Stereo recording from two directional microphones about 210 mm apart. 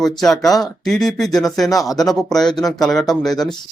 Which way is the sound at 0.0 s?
Centre (ahead or behind).